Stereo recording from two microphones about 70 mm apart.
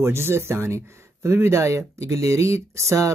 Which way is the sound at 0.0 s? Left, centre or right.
Right.